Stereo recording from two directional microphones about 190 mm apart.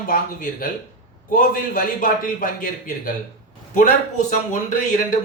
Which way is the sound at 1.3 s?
45° left (ahead or behind).